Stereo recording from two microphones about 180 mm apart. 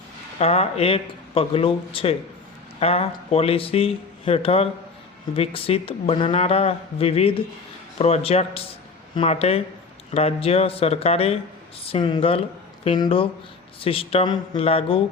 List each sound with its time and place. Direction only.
0.3 s speech: 35° left (ahead or behind)